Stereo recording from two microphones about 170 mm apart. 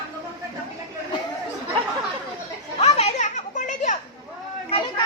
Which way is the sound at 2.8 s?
40° left (ahead or behind).